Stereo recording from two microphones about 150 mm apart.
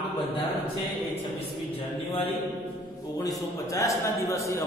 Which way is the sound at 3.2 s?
20° left (ahead or behind).